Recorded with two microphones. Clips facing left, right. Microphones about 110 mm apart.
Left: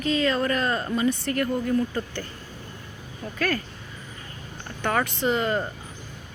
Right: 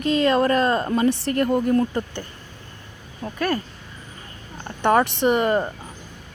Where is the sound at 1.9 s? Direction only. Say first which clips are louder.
Right 3 dB; 20° right (ahead or behind).